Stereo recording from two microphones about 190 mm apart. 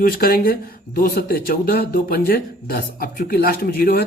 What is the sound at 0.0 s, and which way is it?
Speech, 50° left (ahead or behind).